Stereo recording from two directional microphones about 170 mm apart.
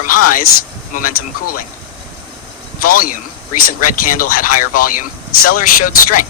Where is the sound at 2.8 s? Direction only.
55° left (ahead or behind).